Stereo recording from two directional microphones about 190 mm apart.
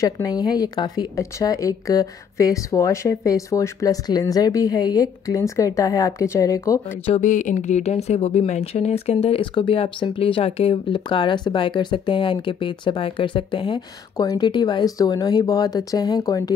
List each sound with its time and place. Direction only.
0.0 s a woman's voice: 20° left (ahead or behind)
7.1 s speech: 40° left (ahead or behind); by 16.5 s 20° left (ahead or behind)